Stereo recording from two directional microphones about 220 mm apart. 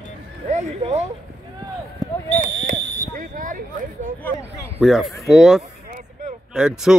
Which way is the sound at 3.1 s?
40° right (ahead or behind).